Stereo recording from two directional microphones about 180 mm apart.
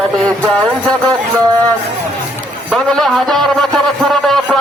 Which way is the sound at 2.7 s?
Centre (ahead or behind).